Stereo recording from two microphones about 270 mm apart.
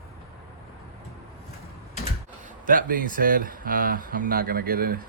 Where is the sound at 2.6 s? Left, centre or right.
Right.